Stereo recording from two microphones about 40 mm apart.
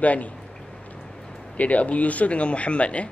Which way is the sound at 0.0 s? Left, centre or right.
Left.